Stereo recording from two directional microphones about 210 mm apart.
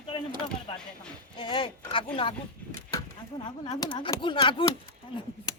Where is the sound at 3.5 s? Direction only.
20° left (ahead or behind).